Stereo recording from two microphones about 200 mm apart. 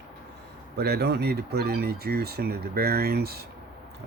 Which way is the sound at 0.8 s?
55° right (ahead or behind).